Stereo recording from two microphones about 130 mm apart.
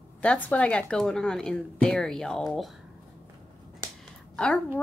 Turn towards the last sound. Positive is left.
turn(degrees=5)  # may be behind; listen again after turning